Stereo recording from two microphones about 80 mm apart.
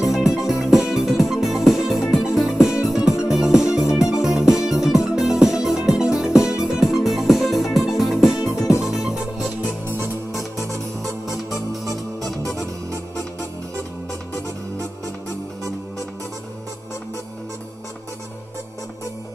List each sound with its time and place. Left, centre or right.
0.0 s music: centre
8.5 s music: left
8.8 s music: centre
11.8 s music: centre